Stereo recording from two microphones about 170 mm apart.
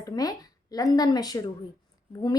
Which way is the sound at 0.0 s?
20° left (ahead or behind).